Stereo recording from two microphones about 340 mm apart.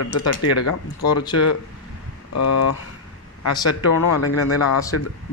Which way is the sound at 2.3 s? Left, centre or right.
Left.